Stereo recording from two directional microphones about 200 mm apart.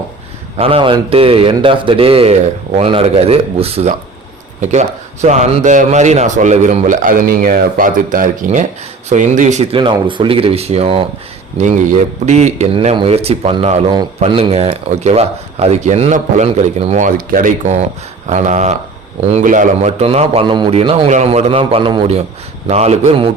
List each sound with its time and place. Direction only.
0.5 s speech: 30° right (ahead or behind)